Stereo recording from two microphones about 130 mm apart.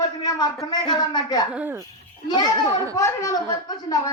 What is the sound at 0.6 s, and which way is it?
Speech, 30° left (ahead or behind).